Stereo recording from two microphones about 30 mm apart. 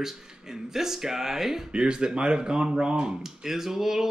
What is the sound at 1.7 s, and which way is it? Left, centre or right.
Speech, right.